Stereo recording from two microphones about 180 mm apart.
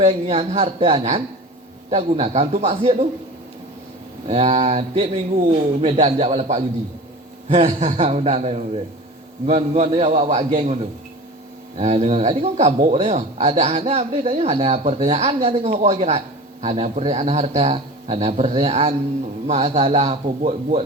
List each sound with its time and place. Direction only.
0.0 s speech: 30° right (ahead or behind)
4.3 s speech: 35° right (ahead or behind)
11.8 s speech: 35° right (ahead or behind)